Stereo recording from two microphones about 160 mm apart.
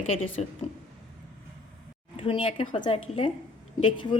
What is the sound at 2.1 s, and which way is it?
A woman's voice, 40° left (ahead or behind).